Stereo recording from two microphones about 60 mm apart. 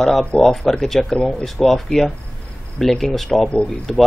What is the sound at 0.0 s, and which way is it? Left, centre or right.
Speech, centre.